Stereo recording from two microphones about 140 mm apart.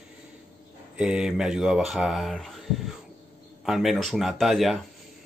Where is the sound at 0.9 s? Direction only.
5° right (ahead or behind).